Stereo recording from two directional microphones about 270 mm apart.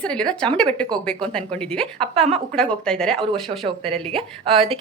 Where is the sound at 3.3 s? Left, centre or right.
Centre.